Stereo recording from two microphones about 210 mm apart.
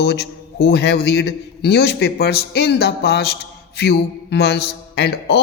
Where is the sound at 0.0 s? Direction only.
50° left (ahead or behind).